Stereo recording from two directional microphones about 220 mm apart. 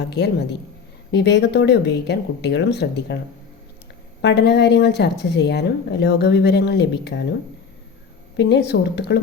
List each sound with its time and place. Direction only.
0.1 s speech: 50° left (ahead or behind)
4.2 s speech: 50° left (ahead or behind)
8.4 s speech: 50° left (ahead or behind)